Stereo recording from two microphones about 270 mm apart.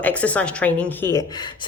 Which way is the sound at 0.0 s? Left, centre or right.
Centre.